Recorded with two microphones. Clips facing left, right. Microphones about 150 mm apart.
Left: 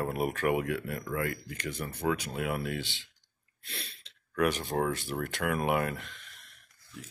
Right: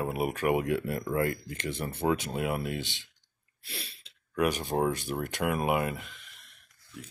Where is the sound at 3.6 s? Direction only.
10° right (ahead or behind).